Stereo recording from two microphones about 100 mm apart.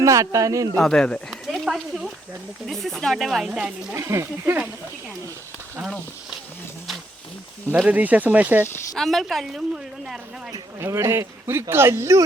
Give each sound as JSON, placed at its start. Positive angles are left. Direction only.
{"t": 0.0, "sound": "a man's voice", "side_deg": -35}
{"t": 0.8, "sound": "a woman's voice", "side_deg": 5}
{"t": 3.9, "sound": "speech", "side_deg": -30}
{"t": 7.8, "sound": "speech", "side_deg": -15}
{"t": 9.0, "sound": "a woman's voice", "side_deg": 0}
{"t": 10.8, "sound": "speech", "side_deg": -25}